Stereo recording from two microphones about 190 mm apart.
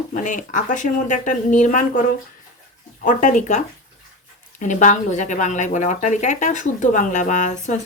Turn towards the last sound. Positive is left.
turn(degrees=40)  # may be behind; listen again after turning